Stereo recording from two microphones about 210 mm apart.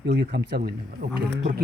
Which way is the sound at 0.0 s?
50° right (ahead or behind).